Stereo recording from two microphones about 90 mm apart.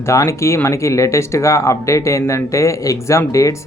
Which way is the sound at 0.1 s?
35° left (ahead or behind).